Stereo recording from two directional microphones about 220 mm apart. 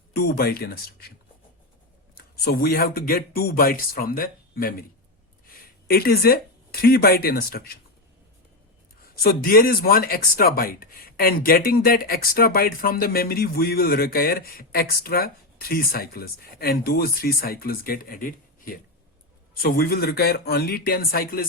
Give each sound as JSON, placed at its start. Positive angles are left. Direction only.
{"t": 0.1, "sound": "speech", "side_deg": 45}
{"t": 2.1, "sound": "speech", "side_deg": 45}
{"t": 5.9, "sound": "speech", "side_deg": 45}
{"t": 9.2, "sound": "speech", "side_deg": 45}